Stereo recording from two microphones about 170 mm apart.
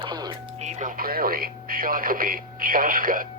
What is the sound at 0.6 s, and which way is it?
Radio, 45° right (ahead or behind).